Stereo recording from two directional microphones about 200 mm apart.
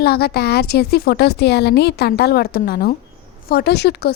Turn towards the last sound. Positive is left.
turn(degrees=55)  # may be behind; listen again after turning